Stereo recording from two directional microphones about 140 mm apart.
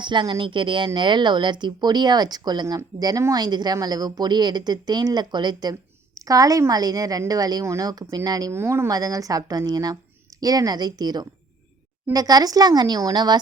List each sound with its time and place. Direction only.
0.0 s speech: 35° right (ahead or behind)